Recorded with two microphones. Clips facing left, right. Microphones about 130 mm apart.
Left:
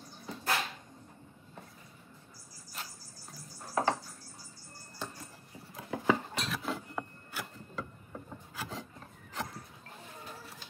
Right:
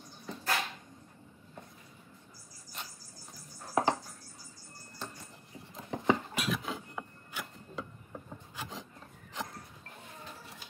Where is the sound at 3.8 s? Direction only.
15° right (ahead or behind).